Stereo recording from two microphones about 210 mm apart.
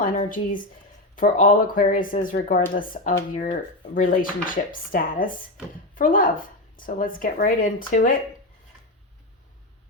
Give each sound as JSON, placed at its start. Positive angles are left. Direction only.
{"t": 0.0, "sound": "a woman's voice", "side_deg": 40}